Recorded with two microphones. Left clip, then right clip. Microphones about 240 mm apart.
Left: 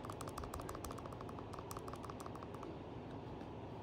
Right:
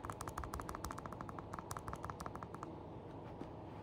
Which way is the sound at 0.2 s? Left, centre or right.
Centre.